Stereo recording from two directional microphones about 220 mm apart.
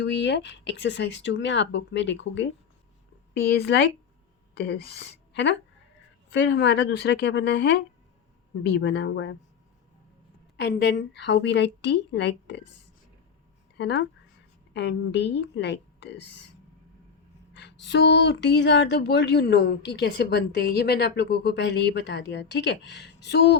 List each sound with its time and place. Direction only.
0.0 s speech: 50° left (ahead or behind)
10.6 s speech: 50° left (ahead or behind)
13.7 s speech: 50° left (ahead or behind)
17.5 s a sound: 50° left (ahead or behind)
17.8 s speech: 50° left (ahead or behind)